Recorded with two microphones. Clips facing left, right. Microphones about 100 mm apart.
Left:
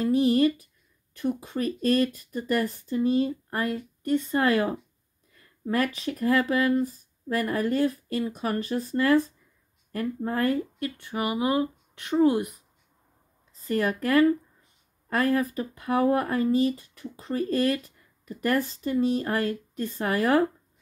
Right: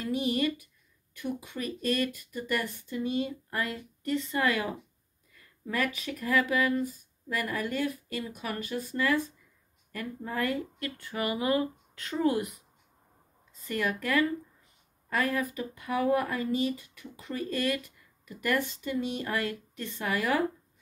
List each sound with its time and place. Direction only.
0.0 s speech: 40° left (ahead or behind)
5.7 s speech: 40° left (ahead or behind)
13.7 s speech: 35° left (ahead or behind)